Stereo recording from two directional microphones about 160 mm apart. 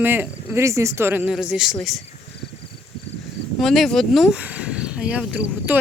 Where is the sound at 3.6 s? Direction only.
Centre (ahead or behind).